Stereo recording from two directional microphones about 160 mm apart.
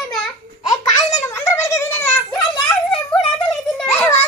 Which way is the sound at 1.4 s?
20° left (ahead or behind).